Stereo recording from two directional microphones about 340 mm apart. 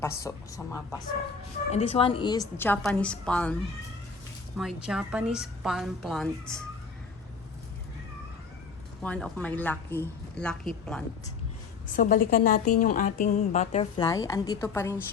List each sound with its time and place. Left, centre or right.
0.2 s a woman's voice: centre
1.7 s a woman's voice: centre
4.5 s a woman's voice: centre
9.0 s a woman's voice: centre
11.9 s a woman's voice: left; by 15.0 s centre